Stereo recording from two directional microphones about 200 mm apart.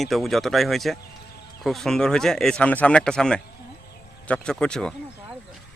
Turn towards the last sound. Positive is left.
turn(degrees=5)  # may be behind; listen again after turning